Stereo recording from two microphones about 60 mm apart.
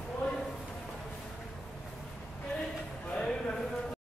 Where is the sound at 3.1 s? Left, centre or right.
Centre.